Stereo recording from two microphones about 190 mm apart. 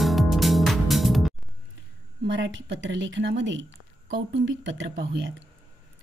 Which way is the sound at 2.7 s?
75° right (ahead or behind).